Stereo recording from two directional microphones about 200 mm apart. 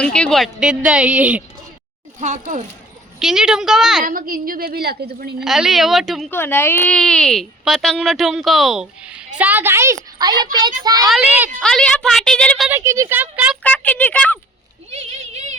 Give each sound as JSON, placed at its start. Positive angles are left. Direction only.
{"t": 0.0, "sound": "speech", "side_deg": 5}
{"t": 2.2, "sound": "a child's voice", "side_deg": -40}
{"t": 3.2, "sound": "speech", "side_deg": 0}
{"t": 4.0, "sound": "a woman's voice", "side_deg": -45}
{"t": 5.4, "sound": "speech", "side_deg": 0}
{"t": 6.3, "sound": "speech", "side_deg": 10}
{"t": 11.0, "sound": "speech", "side_deg": -5}
{"t": 11.6, "sound": "speech", "side_deg": 5}
{"t": 12.7, "sound": "speech", "side_deg": -15}
{"t": 13.6, "sound": "speech", "side_deg": 5}
{"t": 14.8, "sound": "speech", "side_deg": -30}